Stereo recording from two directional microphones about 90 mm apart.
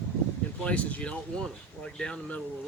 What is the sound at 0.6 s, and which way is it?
Speech, 15° left (ahead or behind).